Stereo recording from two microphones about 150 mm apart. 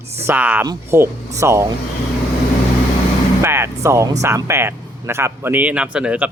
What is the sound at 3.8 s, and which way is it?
Speech, 20° right (ahead or behind).